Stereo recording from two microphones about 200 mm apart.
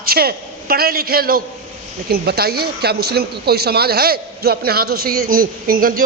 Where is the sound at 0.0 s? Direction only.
50° right (ahead or behind).